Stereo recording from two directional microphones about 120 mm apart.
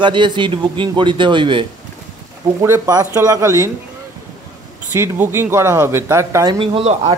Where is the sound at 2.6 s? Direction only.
25° right (ahead or behind).